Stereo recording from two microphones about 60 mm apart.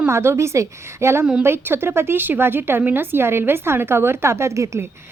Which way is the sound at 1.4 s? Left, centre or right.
Right.